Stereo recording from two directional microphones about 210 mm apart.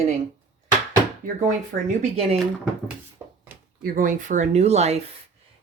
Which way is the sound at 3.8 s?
40° right (ahead or behind).